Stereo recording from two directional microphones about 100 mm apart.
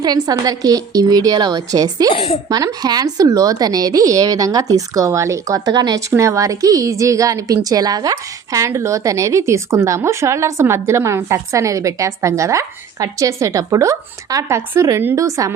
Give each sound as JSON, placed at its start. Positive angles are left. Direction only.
{"t": 0.0, "sound": "a woman's voice", "side_deg": -40}
{"t": 2.1, "sound": "a woman's voice", "side_deg": 70}
{"t": 2.5, "sound": "a woman's voice", "side_deg": -40}
{"t": 6.1, "sound": "a woman's voice", "side_deg": -30}